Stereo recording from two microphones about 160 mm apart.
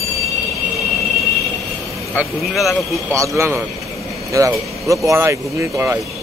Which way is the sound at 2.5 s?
Centre (ahead or behind).